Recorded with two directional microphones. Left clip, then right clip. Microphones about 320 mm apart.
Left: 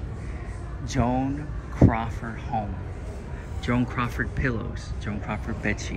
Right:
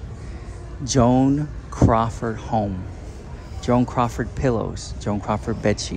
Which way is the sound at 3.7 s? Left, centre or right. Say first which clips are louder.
Right 7 dB; centre.